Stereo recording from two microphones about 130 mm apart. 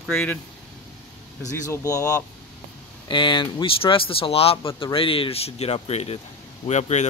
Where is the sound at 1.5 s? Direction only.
20° left (ahead or behind).